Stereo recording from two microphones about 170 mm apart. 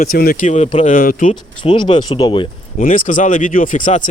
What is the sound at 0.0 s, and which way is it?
Speech, 60° left (ahead or behind).